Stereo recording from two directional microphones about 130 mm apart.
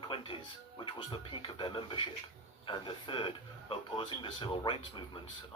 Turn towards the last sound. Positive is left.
turn(degrees=40)  # may be behind; listen again after turning